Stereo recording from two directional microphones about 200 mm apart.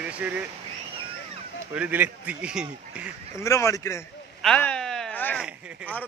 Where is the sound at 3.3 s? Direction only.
15° left (ahead or behind).